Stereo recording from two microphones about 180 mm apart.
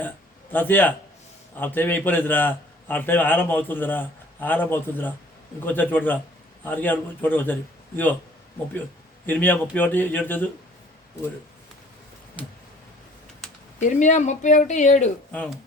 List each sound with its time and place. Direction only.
0.5 s a man's voice: 10° left (ahead or behind)
9.2 s a man's voice: 10° left (ahead or behind)
13.7 s speech: 40° left (ahead or behind)
15.3 s speech: 5° left (ahead or behind)